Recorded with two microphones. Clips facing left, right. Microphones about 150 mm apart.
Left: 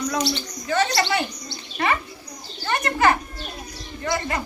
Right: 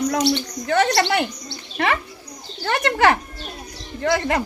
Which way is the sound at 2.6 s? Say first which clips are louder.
Right 3 dB; 90° right.